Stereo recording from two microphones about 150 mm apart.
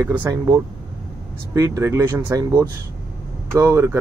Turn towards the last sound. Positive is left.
turn(degrees=-20)  # may be behind; listen again after turning